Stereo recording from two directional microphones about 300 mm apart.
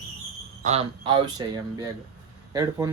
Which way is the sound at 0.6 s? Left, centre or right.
Right.